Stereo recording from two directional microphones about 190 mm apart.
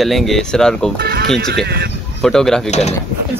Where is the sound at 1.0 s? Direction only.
55° right (ahead or behind).